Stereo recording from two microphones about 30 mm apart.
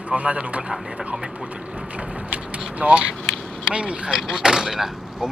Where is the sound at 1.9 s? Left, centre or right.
Right.